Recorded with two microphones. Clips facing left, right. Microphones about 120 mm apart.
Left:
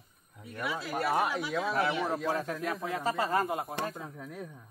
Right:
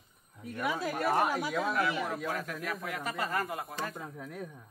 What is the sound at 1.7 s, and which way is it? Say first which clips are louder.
Speech: left 2 dB; 35° left (ahead or behind).